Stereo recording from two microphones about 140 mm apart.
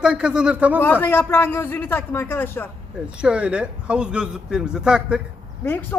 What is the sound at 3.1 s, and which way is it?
Speech, 5° right (ahead or behind).